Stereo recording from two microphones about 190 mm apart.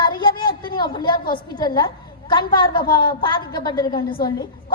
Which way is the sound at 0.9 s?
25° left (ahead or behind).